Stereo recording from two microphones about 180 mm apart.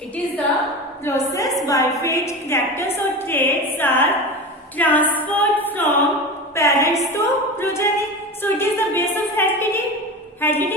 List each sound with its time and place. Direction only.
1.0 s a woman's voice: 15° left (ahead or behind)